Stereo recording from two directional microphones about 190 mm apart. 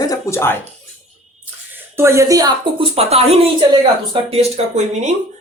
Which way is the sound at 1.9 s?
15° right (ahead or behind).